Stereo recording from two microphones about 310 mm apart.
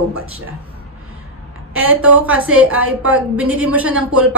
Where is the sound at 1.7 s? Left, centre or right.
Centre.